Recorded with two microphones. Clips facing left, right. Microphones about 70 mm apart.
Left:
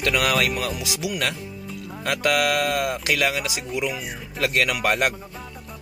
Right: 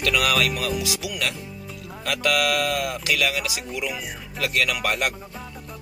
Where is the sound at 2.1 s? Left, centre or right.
Left.